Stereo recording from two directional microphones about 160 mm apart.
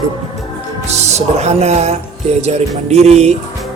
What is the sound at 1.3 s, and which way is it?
Speech, 40° right (ahead or behind).